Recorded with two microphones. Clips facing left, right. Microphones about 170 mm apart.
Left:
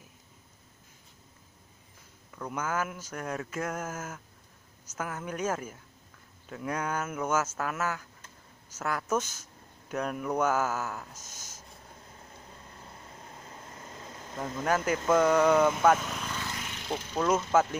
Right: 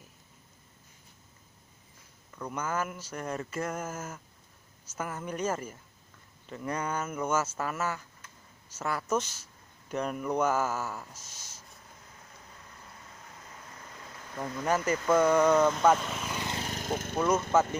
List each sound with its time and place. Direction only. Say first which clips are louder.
2.3 s speech: left 1 dB; centre (ahead or behind)
11.1 s speech: left 2 dB; 45° left (ahead or behind)
13.7 s vehicle: left 3 dB; 25° left (ahead or behind)
14.6 s speech: even; centre (ahead or behind)
16.5 s vehicle: right 3 dB; 40° right (ahead or behind)